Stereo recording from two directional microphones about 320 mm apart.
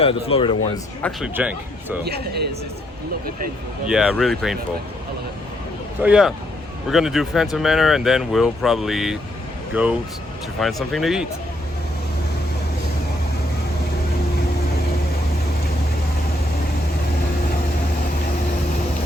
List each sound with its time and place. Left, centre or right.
0.3 s speech: centre
1.0 s speech: centre
2.0 s speech: right
3.8 s speech: centre
6.0 s speech: centre